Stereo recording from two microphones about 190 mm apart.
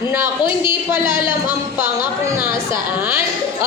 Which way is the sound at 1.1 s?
25° left (ahead or behind).